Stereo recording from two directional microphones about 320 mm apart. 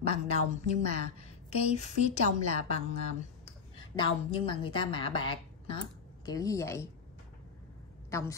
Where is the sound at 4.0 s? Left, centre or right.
Centre.